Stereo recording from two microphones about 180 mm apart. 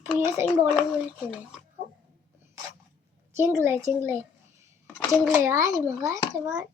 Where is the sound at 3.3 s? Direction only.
15° right (ahead or behind).